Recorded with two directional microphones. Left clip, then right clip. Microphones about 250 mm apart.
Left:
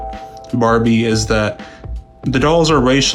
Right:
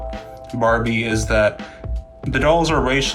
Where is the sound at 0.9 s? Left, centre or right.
Left.